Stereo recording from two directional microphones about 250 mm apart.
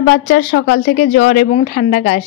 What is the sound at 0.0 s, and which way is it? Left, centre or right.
Speech, left.